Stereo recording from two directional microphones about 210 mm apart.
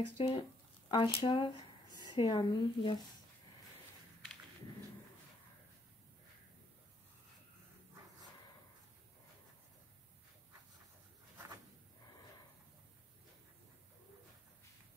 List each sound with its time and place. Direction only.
0.2 s a woman's voice: 25° left (ahead or behind)